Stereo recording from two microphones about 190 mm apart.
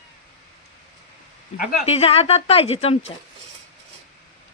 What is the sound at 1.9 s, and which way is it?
A woman's voice, 35° left (ahead or behind).